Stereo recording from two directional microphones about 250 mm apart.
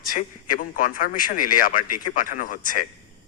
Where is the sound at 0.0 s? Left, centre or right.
Left.